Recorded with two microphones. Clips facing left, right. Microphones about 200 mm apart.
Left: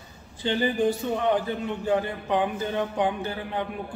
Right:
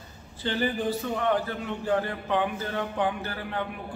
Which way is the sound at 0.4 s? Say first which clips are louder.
Left 4 dB; 15° left (ahead or behind).